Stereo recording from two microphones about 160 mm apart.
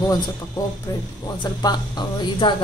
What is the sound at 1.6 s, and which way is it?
Speech, 25° left (ahead or behind).